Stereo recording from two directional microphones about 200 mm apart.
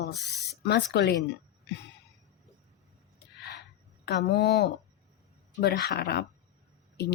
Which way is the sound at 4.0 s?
55° left (ahead or behind).